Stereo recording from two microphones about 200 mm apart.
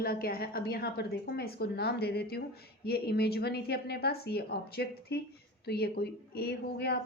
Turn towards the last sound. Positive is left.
turn(degrees=55)  # may be behind; listen again after turning